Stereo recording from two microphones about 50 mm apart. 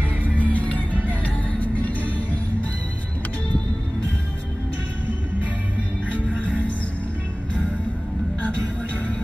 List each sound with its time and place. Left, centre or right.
0.2 s music: left